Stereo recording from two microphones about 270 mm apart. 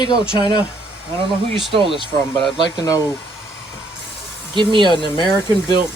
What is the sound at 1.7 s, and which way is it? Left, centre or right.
Speech, centre.